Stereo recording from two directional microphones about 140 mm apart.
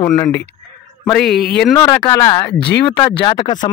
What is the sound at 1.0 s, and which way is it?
Speech, centre (ahead or behind).